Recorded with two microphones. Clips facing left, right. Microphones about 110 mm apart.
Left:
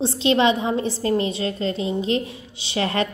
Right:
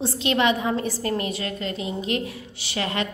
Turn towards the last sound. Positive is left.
turn(degrees=35)  # may be behind; listen again after turning